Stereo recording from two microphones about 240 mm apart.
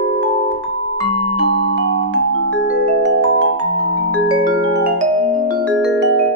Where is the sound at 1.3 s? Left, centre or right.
Left.